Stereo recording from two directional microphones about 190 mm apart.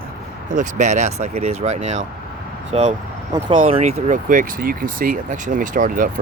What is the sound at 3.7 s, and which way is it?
Speech, 35° right (ahead or behind).